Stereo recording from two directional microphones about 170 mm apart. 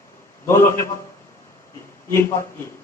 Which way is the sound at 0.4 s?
15° left (ahead or behind).